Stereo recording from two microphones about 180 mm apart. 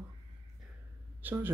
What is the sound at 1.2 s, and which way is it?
Speech, 10° right (ahead or behind).